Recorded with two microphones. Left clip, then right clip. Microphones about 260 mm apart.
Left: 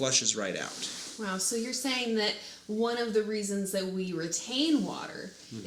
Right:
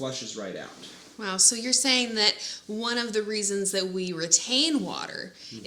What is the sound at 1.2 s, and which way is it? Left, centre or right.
Speech, right.